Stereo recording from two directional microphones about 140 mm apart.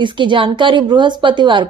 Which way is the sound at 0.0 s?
35° right (ahead or behind).